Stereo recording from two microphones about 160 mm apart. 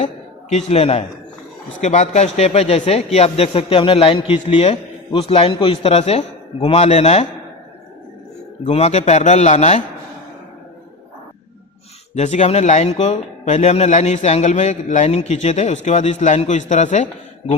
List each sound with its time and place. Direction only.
0.5 s speech: 40° left (ahead or behind)
8.6 s speech: 40° left (ahead or behind)
12.1 s speech: 45° left (ahead or behind)